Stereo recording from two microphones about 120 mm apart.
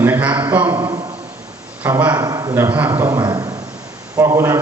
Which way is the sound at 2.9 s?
30° right (ahead or behind).